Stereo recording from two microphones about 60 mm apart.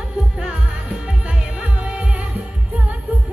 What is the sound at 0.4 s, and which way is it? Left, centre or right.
Music, centre.